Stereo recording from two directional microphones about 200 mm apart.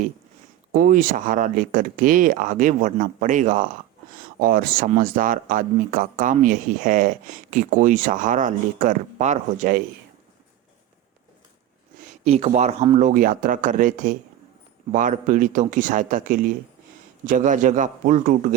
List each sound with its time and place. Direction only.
0.7 s speech: 45° right (ahead or behind)
12.2 s speech: 30° right (ahead or behind)